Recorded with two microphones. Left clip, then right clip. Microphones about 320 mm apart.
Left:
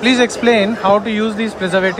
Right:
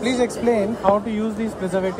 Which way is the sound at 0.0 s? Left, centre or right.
Left.